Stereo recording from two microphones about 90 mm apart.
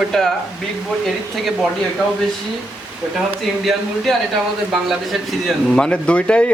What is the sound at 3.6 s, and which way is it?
Speech, centre (ahead or behind).